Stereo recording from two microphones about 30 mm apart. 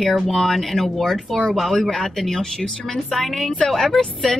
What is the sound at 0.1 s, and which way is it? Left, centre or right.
A woman's voice, centre.